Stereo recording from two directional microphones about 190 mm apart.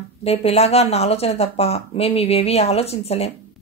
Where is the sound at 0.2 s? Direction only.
30° left (ahead or behind).